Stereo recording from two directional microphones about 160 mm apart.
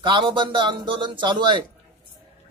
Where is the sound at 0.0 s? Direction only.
30° right (ahead or behind).